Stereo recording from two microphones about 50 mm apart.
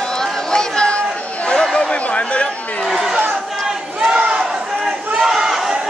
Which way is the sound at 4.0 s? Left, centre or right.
Right.